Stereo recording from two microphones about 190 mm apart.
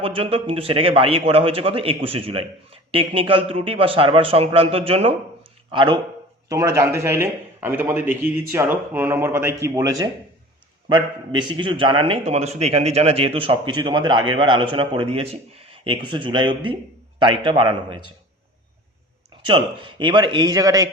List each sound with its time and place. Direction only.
0.0 s a man's voice: 30° right (ahead or behind)
19.5 s a man's voice: 25° right (ahead or behind)